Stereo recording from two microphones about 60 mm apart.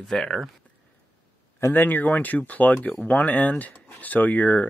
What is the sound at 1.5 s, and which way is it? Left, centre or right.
Speech, left.